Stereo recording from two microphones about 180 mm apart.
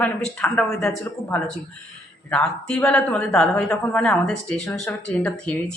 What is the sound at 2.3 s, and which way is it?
A woman's voice, 5° left (ahead or behind).